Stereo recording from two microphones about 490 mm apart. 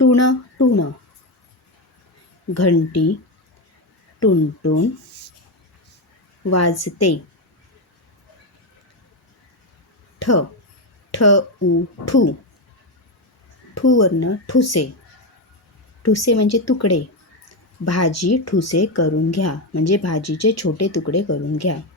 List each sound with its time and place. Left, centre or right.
0.0 s speech: left
2.5 s speech: left
4.2 s speech: left
6.5 s speech: left
10.2 s a sound: left
11.1 s speech: left
13.7 s speech: left
16.0 s speech: left